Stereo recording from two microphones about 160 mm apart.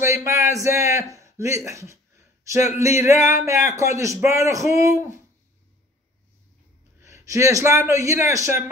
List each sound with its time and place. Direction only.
0.0 s a sound: 15° right (ahead or behind)
1.7 s speech: 20° right (ahead or behind)
7.0 s a man's voice: 20° right (ahead or behind)